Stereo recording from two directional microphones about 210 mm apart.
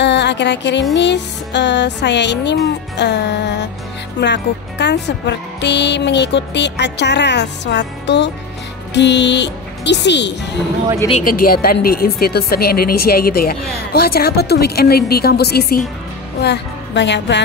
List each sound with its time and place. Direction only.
0.0 s a sound: 55° left (ahead or behind)
0.9 s speech: 55° left (ahead or behind)
11.2 s a woman's voice: 45° left (ahead or behind)
16.3 s music: 55° left (ahead or behind)